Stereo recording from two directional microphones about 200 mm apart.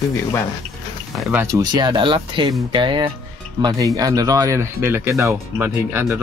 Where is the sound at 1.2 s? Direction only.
10° right (ahead or behind).